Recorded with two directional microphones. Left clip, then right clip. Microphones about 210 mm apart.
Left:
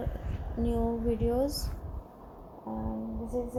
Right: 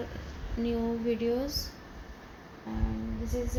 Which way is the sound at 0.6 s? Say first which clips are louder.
Even; 15° left (ahead or behind).